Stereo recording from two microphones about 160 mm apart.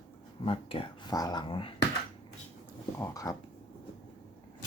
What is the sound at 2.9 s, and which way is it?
Speech, 20° left (ahead or behind).